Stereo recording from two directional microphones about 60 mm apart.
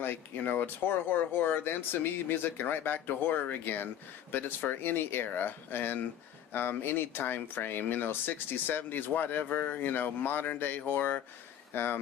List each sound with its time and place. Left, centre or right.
0.0 s speech: left